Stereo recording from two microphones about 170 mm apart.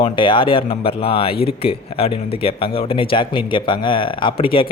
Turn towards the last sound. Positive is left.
turn(degrees=30)  # may be behind; listen again after turning